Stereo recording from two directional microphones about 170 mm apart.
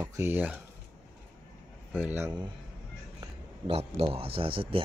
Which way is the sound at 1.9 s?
10° right (ahead or behind).